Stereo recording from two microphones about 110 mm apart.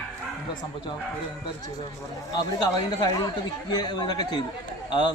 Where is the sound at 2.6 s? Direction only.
40° left (ahead or behind).